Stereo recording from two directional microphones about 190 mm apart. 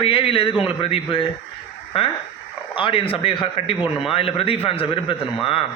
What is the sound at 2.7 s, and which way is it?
A man's voice, 30° left (ahead or behind).